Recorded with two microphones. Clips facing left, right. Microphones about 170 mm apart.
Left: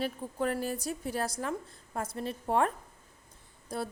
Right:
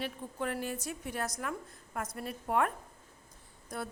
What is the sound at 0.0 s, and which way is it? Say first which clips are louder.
A woman's voice: left 5 dB; 35° left (ahead or behind).